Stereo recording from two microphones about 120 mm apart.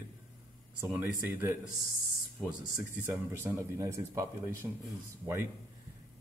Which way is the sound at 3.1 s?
20° right (ahead or behind).